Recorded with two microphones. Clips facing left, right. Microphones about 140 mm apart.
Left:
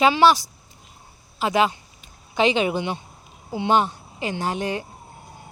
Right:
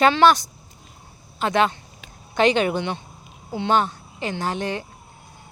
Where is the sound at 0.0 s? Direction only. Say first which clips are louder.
Right 1 dB; 5° left (ahead or behind).